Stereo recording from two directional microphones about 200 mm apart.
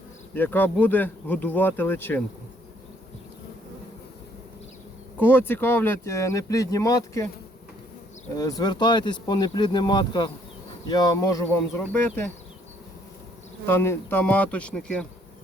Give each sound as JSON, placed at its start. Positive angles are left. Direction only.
{"t": 0.3, "sound": "speech", "side_deg": 10}
{"t": 5.2, "sound": "speech", "side_deg": 10}
{"t": 8.4, "sound": "speech", "side_deg": 20}
{"t": 13.7, "sound": "speech", "side_deg": 10}